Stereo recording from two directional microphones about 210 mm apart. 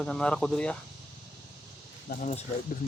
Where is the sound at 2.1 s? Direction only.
35° left (ahead or behind).